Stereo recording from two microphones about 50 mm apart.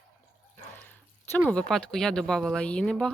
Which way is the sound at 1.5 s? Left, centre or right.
Left.